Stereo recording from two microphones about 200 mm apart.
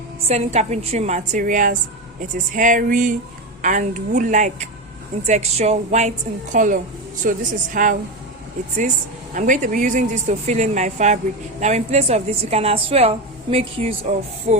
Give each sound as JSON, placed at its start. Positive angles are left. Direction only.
{"t": 0.3, "sound": "a woman's voice", "side_deg": -35}
{"t": 9.3, "sound": "a woman's voice", "side_deg": -40}